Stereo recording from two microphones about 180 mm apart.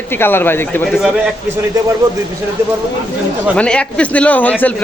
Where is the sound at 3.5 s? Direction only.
5° left (ahead or behind).